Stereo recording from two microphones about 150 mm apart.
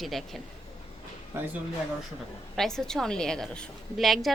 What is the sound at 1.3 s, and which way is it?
Speech, 20° right (ahead or behind).